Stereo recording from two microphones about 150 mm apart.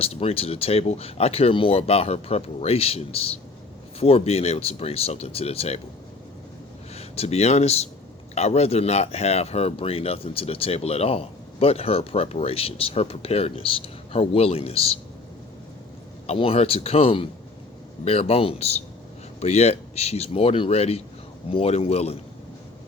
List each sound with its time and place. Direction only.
0.0 s speech: 40° left (ahead or behind)
6.9 s speech: 45° left (ahead or behind)
16.2 s speech: 40° left (ahead or behind)